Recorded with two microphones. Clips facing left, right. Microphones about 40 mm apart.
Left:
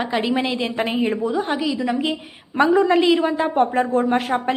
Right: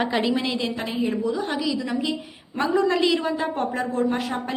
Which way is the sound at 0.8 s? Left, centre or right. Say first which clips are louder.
Left 4 dB; left.